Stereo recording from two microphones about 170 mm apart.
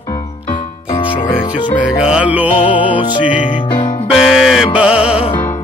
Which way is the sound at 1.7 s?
5° right (ahead or behind).